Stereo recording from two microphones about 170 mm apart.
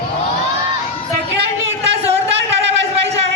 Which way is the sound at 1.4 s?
90° right.